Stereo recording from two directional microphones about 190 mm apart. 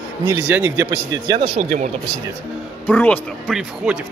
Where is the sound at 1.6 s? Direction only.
40° right (ahead or behind).